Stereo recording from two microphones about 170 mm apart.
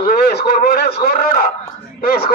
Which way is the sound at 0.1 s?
65° left (ahead or behind).